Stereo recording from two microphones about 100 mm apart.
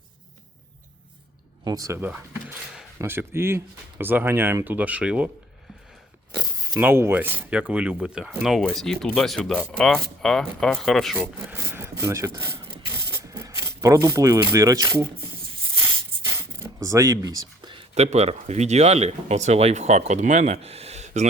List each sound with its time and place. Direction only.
1.6 s speech: 35° right (ahead or behind)
2.0 s speech: 20° right (ahead or behind)
6.7 s speech: 20° right (ahead or behind); by 11.2 s 5° left (ahead or behind)
11.2 s speech: 25° right (ahead or behind)
12.9 s a sound: 25° right (ahead or behind)
17.7 s speech: 75° right (ahead or behind); by 21.0 s 90° right